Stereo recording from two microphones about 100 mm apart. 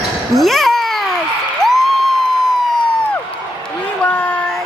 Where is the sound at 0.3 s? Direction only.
Centre (ahead or behind).